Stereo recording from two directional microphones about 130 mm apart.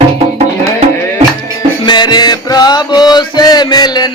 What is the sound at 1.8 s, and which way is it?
Music, 35° left (ahead or behind).